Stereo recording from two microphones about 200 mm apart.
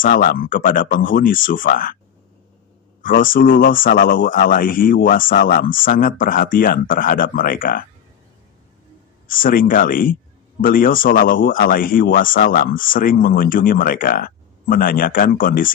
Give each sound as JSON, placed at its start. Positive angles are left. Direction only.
{"t": 0.0, "sound": "speech", "side_deg": 45}
{"t": 3.0, "sound": "speech", "side_deg": 45}
{"t": 9.3, "sound": "speech", "side_deg": 45}